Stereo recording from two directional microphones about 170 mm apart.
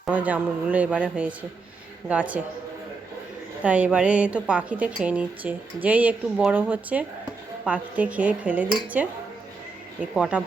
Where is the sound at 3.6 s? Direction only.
10° right (ahead or behind).